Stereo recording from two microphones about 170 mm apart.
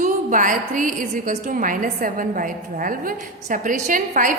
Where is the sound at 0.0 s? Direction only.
50° right (ahead or behind).